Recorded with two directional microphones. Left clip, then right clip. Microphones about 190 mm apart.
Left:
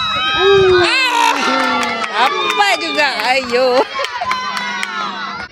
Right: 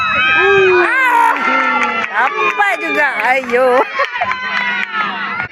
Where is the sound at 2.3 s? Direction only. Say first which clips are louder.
Right 1 dB; 60° left (ahead or behind).